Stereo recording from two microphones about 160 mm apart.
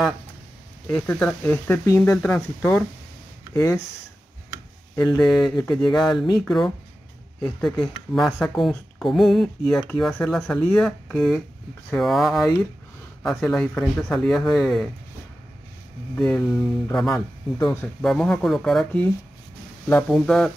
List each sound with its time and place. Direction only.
0.8 s speech: 10° left (ahead or behind)
4.9 s speech: 20° left (ahead or behind)
5.8 s speech: 5° left (ahead or behind)
16.2 s speech: 5° left (ahead or behind)